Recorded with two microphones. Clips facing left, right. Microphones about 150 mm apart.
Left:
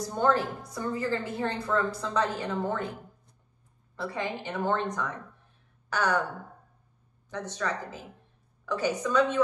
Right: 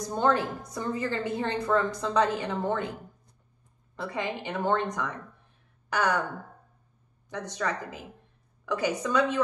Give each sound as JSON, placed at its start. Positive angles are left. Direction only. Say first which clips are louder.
{"t": 0.0, "sound": "a woman's voice", "louder": "even", "side_deg": -20}
{"t": 3.9, "sound": "a woman's voice", "louder": "right 1 dB", "side_deg": -15}
{"t": 5.9, "sound": "speech", "louder": "right 1 dB", "side_deg": -15}
{"t": 7.2, "sound": "a woman's voice", "louder": "right 1 dB", "side_deg": -15}